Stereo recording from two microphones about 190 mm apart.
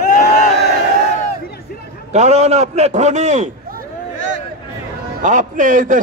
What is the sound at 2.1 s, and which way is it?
A man's voice, 35° right (ahead or behind).